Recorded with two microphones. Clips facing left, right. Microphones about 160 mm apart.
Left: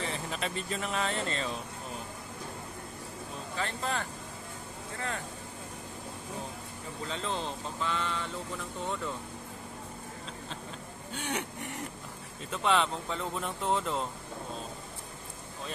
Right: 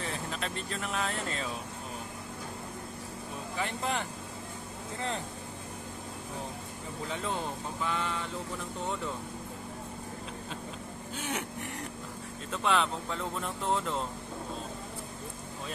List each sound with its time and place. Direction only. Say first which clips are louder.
0.0 s speech: left 1 dB; centre (ahead or behind)
3.5 s speech: right 1 dB; 15° right (ahead or behind)
7.1 s speech: even; 15° right (ahead or behind)
11.1 s speech: left 1 dB; centre (ahead or behind)